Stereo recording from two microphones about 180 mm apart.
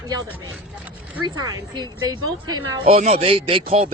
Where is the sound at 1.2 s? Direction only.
20° right (ahead or behind).